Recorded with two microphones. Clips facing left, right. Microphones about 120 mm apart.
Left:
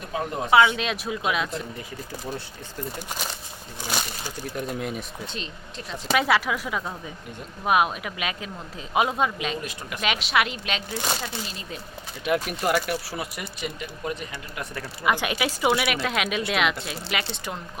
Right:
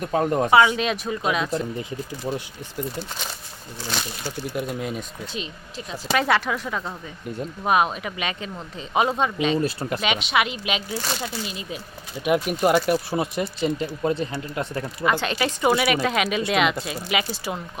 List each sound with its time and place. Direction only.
0.1 s speech: 45° right (ahead or behind)
0.5 s speech: 5° right (ahead or behind)
3.8 s speech: 10° left (ahead or behind)
4.5 s speech: 5° right (ahead or behind)
9.6 s speech: 35° right (ahead or behind)
10.0 s speech: centre (ahead or behind)
10.9 s speech: 20° left (ahead or behind)
12.2 s speech: 20° right (ahead or behind)
15.0 s speech: 10° left (ahead or behind); by 17.6 s 5° right (ahead or behind)